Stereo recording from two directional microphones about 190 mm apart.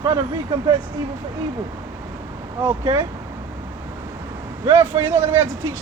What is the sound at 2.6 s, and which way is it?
Speech, 15° right (ahead or behind).